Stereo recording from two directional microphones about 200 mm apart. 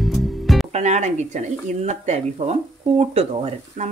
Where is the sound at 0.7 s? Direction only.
35° right (ahead or behind).